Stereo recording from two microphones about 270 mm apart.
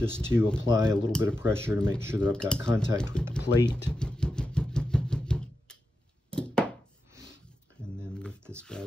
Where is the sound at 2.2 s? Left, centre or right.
Centre.